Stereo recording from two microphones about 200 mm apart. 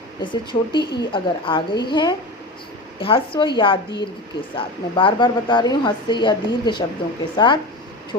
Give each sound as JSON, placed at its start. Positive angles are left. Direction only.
{"t": 0.2, "sound": "speech", "side_deg": 25}